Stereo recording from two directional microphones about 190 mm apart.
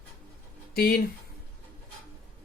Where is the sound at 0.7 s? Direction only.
55° left (ahead or behind).